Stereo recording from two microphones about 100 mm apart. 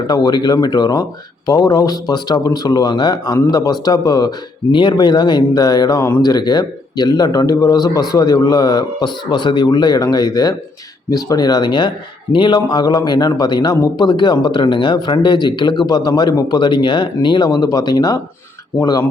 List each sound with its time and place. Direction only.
0.1 s a man's voice: 45° left (ahead or behind)